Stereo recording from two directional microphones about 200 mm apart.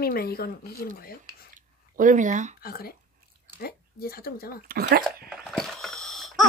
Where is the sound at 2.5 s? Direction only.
50° left (ahead or behind).